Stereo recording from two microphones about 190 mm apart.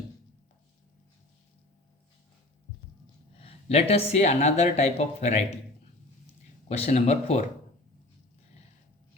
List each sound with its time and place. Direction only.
3.3 s speech: 30° left (ahead or behind)
6.7 s speech: 35° left (ahead or behind)